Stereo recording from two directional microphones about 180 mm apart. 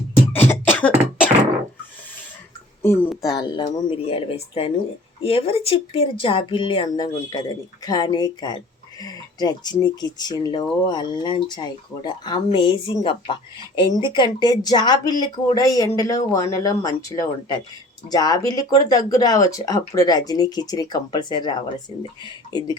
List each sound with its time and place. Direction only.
0.7 s beatboxing: 10° left (ahead or behind)
2.8 s a sound: 15° left (ahead or behind)
3.2 s speech: 20° left (ahead or behind)